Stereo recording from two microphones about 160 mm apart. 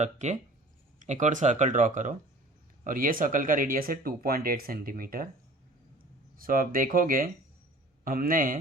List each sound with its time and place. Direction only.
0.0 s speech: 45° right (ahead or behind); by 5.3 s 65° right (ahead or behind)
6.3 s speech: 60° right (ahead or behind)